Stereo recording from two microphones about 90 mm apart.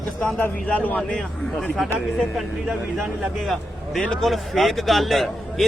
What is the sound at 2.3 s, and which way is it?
A man's voice, centre (ahead or behind).